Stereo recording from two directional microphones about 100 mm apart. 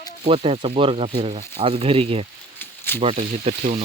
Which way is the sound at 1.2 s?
85° right.